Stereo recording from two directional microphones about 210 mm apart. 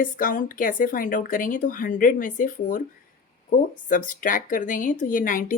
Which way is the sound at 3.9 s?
40° left (ahead or behind).